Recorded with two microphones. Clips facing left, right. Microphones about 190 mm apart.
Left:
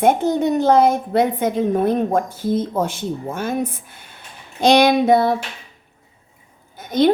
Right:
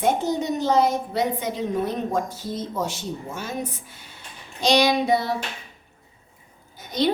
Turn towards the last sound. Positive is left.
turn(degrees=55)  # may be behind; listen again after turning